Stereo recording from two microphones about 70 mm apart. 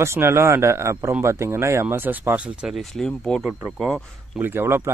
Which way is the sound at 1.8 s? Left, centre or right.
Right.